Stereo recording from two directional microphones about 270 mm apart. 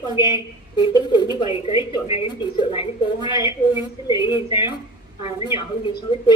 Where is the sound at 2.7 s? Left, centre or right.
Centre.